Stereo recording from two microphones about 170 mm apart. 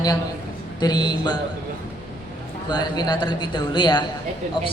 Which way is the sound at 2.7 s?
25° left (ahead or behind).